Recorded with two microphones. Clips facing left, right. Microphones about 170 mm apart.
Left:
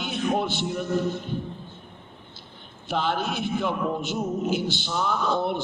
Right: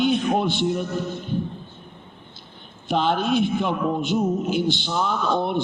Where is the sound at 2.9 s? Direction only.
20° right (ahead or behind).